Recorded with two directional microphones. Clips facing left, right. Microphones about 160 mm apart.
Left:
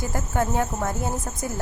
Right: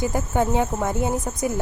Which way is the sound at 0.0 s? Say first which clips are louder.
Right 4 dB; 20° right (ahead or behind).